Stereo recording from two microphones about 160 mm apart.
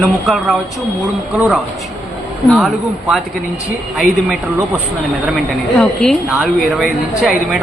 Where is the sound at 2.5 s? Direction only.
Centre (ahead or behind).